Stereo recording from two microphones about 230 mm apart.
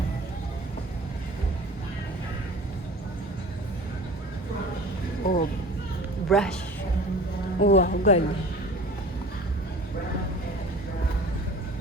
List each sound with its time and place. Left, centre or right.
5.2 s a sound: left
6.2 s speech: centre
7.6 s a man's voice: left